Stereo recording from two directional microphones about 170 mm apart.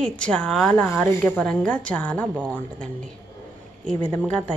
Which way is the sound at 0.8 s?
15° left (ahead or behind).